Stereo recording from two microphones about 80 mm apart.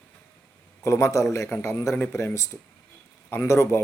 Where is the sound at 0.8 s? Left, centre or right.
Left.